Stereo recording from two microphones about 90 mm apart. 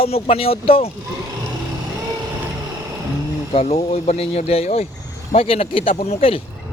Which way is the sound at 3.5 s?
90° left.